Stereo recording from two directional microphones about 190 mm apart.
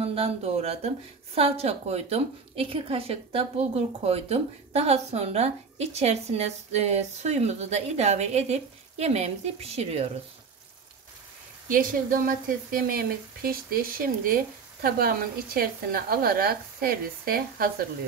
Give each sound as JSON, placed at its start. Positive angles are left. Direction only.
{"t": 0.0, "sound": "a woman's voice", "side_deg": -30}
{"t": 11.7, "sound": "a woman's voice", "side_deg": -45}